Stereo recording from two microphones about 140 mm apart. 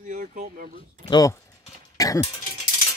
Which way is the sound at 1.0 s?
30° left (ahead or behind).